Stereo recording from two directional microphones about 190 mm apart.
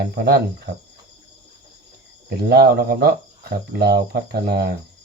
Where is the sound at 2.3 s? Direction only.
55° right (ahead or behind).